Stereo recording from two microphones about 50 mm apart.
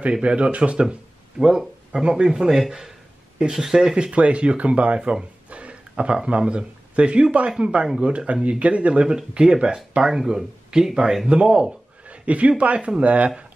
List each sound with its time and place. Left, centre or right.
0.1 s speech: right
1.4 s speech: centre
1.9 s speech: right